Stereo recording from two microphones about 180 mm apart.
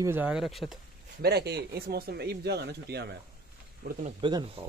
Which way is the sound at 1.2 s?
65° right (ahead or behind).